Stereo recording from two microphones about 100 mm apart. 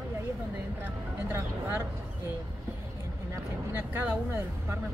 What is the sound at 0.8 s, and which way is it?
Speech, 20° right (ahead or behind).